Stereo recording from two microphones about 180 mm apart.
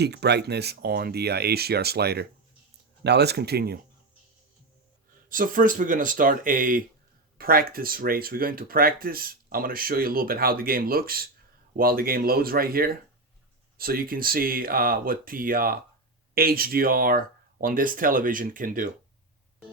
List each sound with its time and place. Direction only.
0.0 s speech: 65° right (ahead or behind)
5.3 s speech: 50° right (ahead or behind)